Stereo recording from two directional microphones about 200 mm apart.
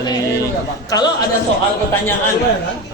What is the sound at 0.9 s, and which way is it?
Speech, 20° left (ahead or behind).